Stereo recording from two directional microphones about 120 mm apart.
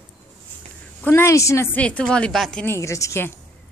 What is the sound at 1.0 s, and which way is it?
Speech, 20° left (ahead or behind).